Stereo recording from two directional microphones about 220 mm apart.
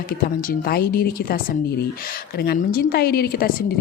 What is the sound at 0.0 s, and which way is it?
A woman's voice, 40° left (ahead or behind).